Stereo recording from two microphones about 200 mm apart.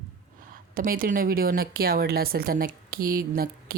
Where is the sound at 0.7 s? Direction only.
45° right (ahead or behind).